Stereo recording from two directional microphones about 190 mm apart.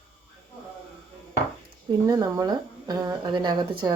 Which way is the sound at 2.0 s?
20° right (ahead or behind).